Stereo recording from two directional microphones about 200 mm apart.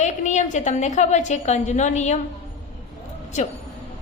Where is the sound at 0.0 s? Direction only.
35° left (ahead or behind).